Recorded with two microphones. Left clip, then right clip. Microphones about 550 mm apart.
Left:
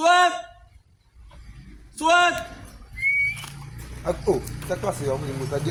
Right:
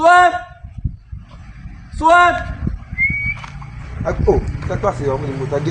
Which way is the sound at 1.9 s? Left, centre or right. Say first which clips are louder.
Right 8 dB; left.